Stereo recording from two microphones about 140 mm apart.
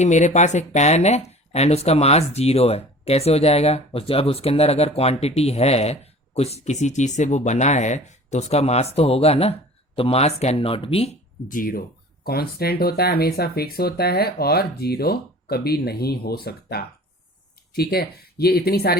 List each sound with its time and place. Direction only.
0.0 s speech: 60° left (ahead or behind); by 11.1 s 40° left (ahead or behind)
11.4 s speech: 85° left
17.9 s speech: 90° left